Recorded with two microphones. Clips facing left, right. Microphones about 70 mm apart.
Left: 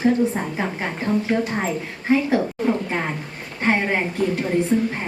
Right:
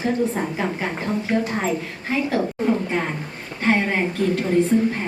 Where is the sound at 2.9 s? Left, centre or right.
Centre.